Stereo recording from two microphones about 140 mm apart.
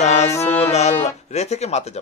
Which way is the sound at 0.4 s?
50° left (ahead or behind).